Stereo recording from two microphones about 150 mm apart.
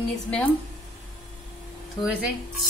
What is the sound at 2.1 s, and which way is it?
Speech, 5° right (ahead or behind).